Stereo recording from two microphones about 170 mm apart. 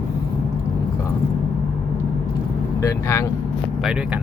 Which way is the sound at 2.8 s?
20° left (ahead or behind).